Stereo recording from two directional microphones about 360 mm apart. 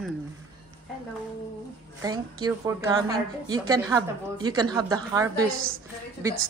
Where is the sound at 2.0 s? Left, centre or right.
Centre.